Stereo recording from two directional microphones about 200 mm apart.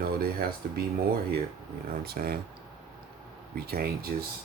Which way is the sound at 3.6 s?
50° right (ahead or behind).